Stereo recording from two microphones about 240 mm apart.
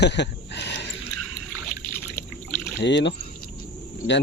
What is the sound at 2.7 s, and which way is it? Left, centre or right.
Speech, left.